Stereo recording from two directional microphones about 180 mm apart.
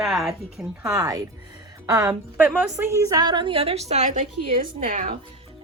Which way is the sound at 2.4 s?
5° right (ahead or behind).